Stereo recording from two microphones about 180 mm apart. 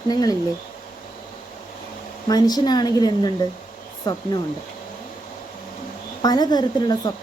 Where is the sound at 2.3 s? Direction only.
20° left (ahead or behind).